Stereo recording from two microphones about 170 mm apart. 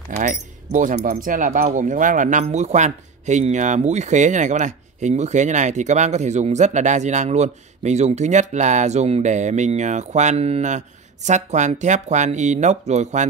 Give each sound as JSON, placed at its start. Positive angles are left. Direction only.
{"t": 0.2, "sound": "speech", "side_deg": -45}